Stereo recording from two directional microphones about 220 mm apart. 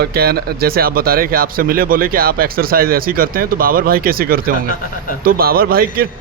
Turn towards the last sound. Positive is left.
turn(degrees=-45)  # may be behind; listen again after turning